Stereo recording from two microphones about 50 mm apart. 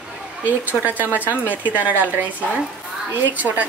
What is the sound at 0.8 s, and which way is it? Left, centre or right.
Speech, right.